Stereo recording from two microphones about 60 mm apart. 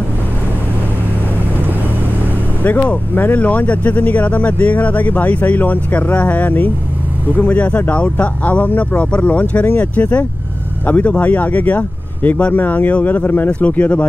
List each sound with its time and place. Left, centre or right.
2.6 s speech: left